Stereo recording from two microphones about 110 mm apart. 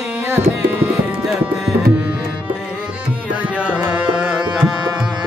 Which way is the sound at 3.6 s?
15° right (ahead or behind).